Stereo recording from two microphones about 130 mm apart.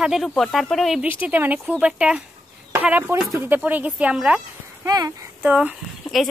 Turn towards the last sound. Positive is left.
turn(degrees=-10)  # may be behind; listen again after turning